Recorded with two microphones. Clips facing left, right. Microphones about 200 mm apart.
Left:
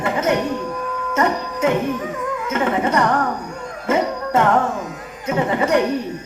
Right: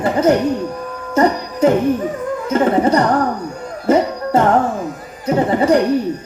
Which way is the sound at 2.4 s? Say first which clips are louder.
Right 6 dB; 35° right (ahead or behind).